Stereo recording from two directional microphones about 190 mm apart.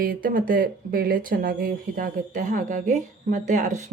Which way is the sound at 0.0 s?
50° right (ahead or behind).